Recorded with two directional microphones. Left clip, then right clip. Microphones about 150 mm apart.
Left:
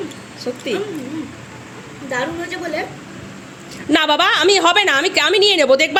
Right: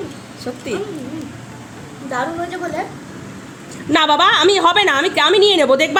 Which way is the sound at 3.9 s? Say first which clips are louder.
Right 2 dB; 15° left (ahead or behind).